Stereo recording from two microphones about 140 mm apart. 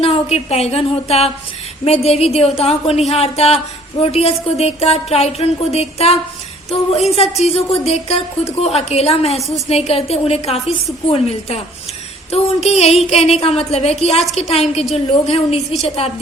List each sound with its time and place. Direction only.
0.0 s a woman's voice: 50° left (ahead or behind)